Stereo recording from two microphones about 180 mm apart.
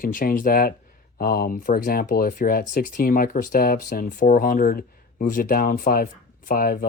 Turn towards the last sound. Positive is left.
turn(degrees=50)  # may be behind; listen again after turning